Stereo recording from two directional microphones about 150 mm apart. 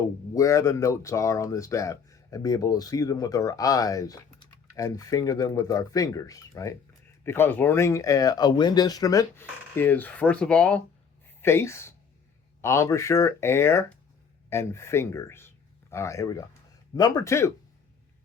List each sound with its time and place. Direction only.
0.0 s speech: 20° left (ahead or behind)